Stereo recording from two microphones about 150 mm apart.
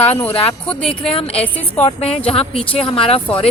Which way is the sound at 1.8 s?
45° left (ahead or behind).